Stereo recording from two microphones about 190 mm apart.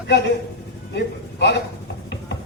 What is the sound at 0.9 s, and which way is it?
Speech, 60° left (ahead or behind).